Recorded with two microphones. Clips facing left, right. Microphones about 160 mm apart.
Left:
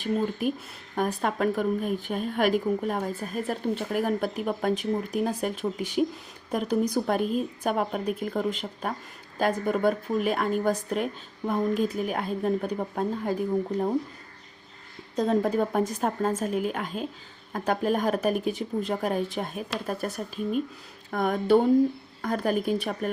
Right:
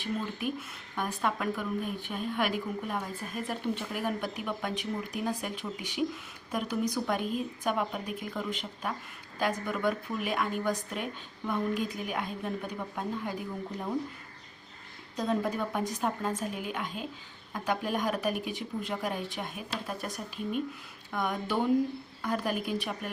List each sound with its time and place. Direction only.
0.0 s speech: 45° left (ahead or behind)
15.2 s speech: 45° left (ahead or behind)